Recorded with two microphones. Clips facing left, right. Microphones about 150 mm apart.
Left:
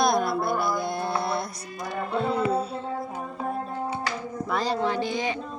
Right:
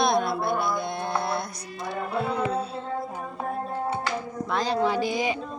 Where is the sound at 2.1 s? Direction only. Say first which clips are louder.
Left 2 dB; 5° right (ahead or behind).